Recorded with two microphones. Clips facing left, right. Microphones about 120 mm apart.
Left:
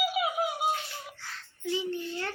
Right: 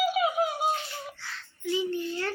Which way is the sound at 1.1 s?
40° left (ahead or behind).